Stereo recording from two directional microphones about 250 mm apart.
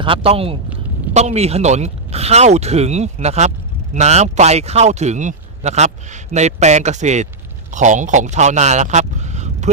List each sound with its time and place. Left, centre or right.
0.0 s a man's voice: right